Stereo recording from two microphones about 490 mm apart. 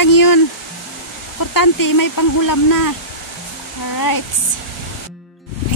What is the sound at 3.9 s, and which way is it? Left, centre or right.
Speech, left.